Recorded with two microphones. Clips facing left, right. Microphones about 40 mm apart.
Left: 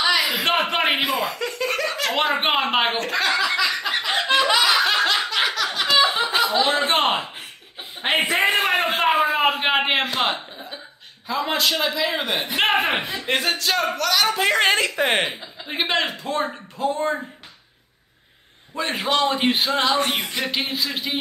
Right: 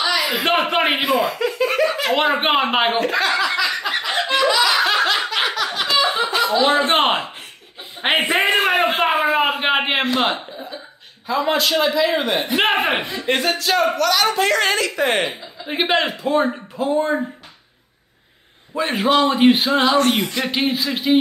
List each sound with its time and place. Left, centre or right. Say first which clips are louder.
0.2 s speech: right 2 dB; centre
4.6 s laughter: right 2 dB; centre
6.9 s a man's voice: right 3 dB; centre
8.4 s a sound: right 3 dB; centre
11.2 s a man's voice: right 3 dB; centre
14.5 s a woman's voice: even; left
15.0 s speech: right 2 dB; centre
15.6 s speech: right 4 dB; centre
18.8 s a man's voice: right 5 dB; centre